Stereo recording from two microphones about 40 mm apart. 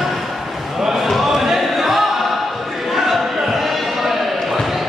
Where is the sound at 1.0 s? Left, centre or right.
Centre.